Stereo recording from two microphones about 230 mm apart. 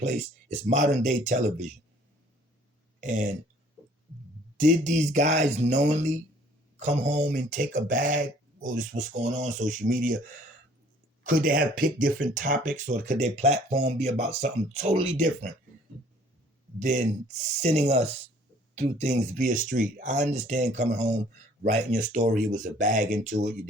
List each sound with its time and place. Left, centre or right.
0.5 s speech: right
3.0 s speech: right
4.5 s speech: right
11.2 s speech: right
16.8 s speech: right